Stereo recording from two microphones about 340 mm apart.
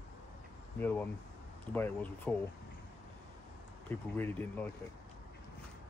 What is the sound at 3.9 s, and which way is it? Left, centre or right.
Speech, centre.